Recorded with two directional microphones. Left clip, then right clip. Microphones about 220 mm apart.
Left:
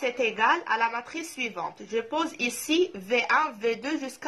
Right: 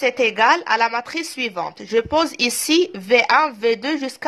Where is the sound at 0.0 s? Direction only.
40° right (ahead or behind).